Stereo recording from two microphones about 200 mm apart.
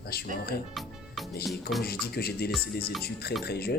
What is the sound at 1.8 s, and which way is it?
Speech, 50° left (ahead or behind).